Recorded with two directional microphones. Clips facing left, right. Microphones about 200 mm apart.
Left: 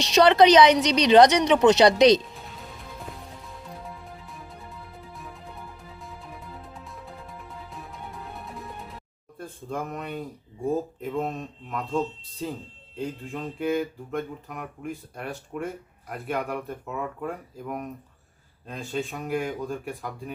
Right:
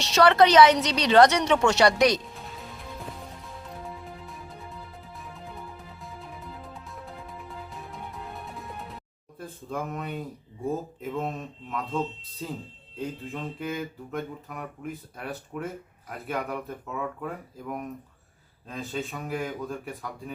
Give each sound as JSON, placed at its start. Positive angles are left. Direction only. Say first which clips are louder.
{"t": 0.0, "sound": "a woman's voice", "louder": "left 2 dB", "side_deg": 15}
{"t": 2.3, "sound": "music", "louder": "right 1 dB", "side_deg": 0}
{"t": 9.4, "sound": "speech", "louder": "left 1 dB", "side_deg": -5}